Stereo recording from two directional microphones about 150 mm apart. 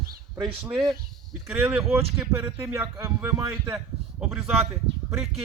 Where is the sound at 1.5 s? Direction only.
10° right (ahead or behind).